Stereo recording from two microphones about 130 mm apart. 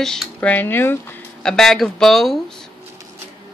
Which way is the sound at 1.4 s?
5° left (ahead or behind).